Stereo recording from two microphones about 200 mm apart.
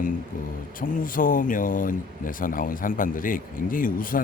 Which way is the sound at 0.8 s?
45° left (ahead or behind).